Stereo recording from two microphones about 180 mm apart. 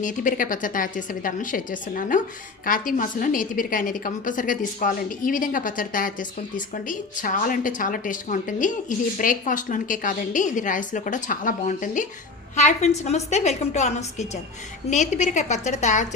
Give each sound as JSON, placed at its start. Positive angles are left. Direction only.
{"t": 0.0, "sound": "a woman's voice", "side_deg": 45}